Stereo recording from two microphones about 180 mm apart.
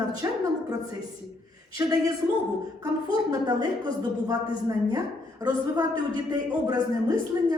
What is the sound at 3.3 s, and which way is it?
A woman's voice, 20° right (ahead or behind).